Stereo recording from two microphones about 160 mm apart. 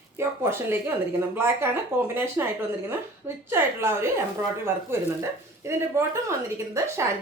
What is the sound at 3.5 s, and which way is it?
Speech, 15° right (ahead or behind).